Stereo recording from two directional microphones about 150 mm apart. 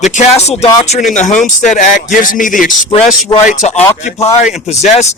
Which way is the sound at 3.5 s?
50° left (ahead or behind).